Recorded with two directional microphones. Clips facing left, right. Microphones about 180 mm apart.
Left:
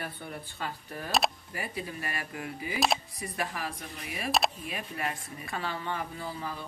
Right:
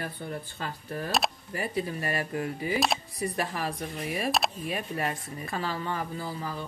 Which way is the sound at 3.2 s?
40° right (ahead or behind).